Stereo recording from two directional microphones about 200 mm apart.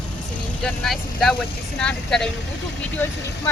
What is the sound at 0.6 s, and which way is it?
Speech, centre (ahead or behind).